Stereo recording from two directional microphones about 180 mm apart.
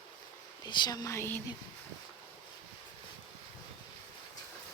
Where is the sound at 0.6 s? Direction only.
25° left (ahead or behind).